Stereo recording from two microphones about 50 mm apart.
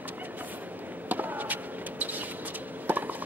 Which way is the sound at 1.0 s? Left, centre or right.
Right.